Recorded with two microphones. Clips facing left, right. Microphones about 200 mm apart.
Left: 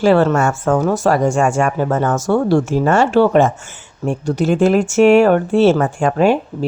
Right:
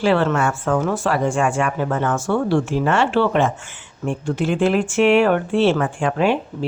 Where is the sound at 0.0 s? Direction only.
45° left (ahead or behind).